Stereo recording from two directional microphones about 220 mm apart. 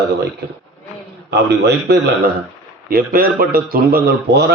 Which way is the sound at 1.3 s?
50° right (ahead or behind).